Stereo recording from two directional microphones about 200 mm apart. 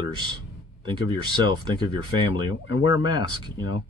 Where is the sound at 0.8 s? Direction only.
25° right (ahead or behind).